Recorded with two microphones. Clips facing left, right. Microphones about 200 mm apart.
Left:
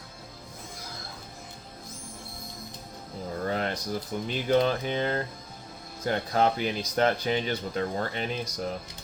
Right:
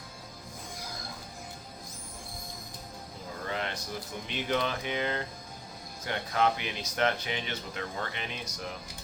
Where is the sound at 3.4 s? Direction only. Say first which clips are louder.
Left 5 dB; 40° left (ahead or behind).